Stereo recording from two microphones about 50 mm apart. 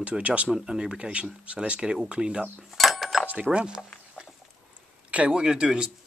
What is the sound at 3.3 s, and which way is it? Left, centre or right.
Speech, right.